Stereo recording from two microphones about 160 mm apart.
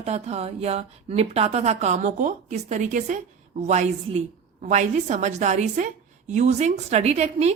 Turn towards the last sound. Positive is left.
turn(degrees=-40)  # may be behind; listen again after turning